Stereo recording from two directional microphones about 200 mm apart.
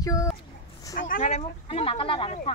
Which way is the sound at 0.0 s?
15° left (ahead or behind).